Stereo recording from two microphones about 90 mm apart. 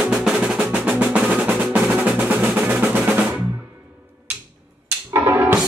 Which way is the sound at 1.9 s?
10° right (ahead or behind).